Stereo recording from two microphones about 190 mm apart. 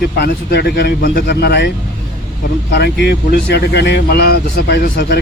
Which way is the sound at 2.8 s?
60° left (ahead or behind).